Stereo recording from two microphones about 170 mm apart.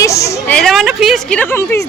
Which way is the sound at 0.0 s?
20° left (ahead or behind).